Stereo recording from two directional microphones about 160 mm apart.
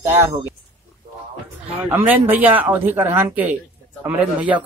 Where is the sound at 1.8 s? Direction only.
10° right (ahead or behind).